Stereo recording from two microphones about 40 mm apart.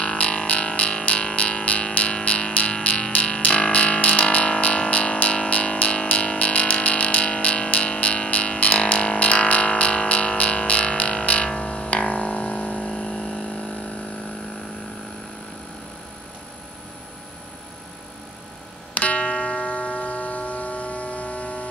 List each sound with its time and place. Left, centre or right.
0.0 s a sound: left
12.8 s vehicle: left
18.9 s music: left